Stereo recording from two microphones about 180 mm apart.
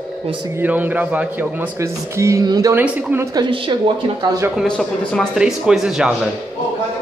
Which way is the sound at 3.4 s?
30° right (ahead or behind).